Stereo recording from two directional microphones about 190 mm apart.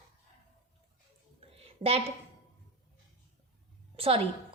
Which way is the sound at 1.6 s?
30° right (ahead or behind).